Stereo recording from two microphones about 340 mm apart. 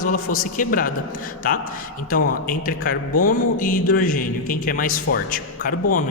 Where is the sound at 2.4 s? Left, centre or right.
Left.